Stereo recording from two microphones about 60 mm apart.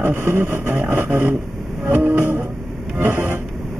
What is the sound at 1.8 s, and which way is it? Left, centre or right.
Train, right.